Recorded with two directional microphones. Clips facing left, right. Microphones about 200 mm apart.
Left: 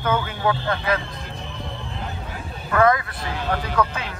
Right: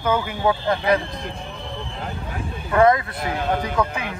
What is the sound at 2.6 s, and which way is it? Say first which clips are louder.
Speech: right 2 dB; 25° right (ahead or behind).